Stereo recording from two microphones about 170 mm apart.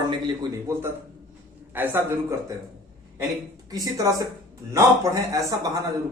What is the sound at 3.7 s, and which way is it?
A man's voice, 20° right (ahead or behind).